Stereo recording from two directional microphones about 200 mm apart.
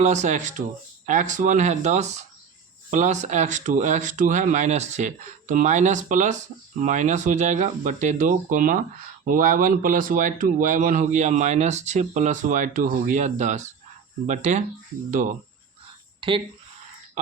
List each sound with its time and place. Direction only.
0.0 s speech: 35° right (ahead or behind)
16.2 s speech: 25° right (ahead or behind)